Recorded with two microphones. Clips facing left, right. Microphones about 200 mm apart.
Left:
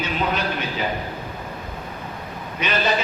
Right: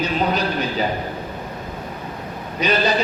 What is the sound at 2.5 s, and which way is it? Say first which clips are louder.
Speech: right 4 dB; 35° right (ahead or behind).